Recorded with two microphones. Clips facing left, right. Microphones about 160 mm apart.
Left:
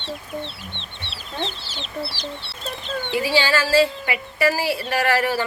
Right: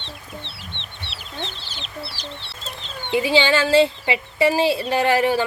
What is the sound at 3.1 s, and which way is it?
A woman's voice, 20° right (ahead or behind).